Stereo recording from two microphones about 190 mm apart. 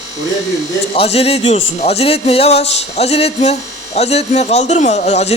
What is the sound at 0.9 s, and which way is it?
A man's voice, 30° left (ahead or behind).